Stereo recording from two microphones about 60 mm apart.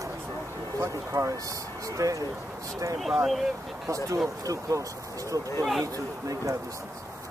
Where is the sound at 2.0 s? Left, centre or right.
Right.